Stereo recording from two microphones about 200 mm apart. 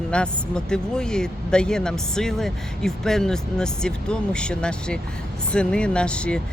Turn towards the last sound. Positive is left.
turn(degrees=5)  # may be behind; listen again after turning